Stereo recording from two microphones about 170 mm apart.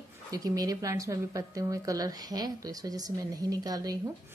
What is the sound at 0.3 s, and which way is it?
Speech, 20° right (ahead or behind).